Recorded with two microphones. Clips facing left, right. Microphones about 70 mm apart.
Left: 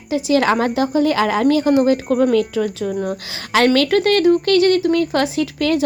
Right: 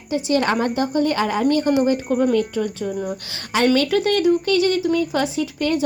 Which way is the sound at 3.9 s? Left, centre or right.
Left.